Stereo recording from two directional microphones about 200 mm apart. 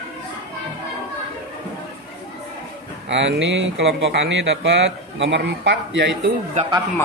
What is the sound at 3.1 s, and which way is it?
Speech, 60° right (ahead or behind).